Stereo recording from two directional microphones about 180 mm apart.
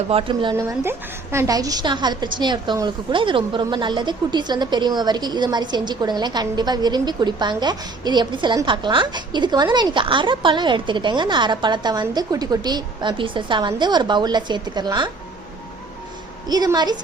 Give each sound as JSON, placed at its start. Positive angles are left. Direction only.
{"t": 0.1, "sound": "speech", "side_deg": -30}
{"t": 0.5, "sound": "a woman's voice", "side_deg": -15}
{"t": 16.5, "sound": "a woman's voice", "side_deg": -20}